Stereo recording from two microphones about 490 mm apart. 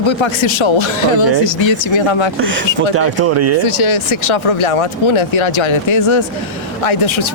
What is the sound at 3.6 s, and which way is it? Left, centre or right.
Speech, left.